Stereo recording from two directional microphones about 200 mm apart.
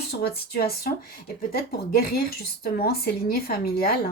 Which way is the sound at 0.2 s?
50° left (ahead or behind).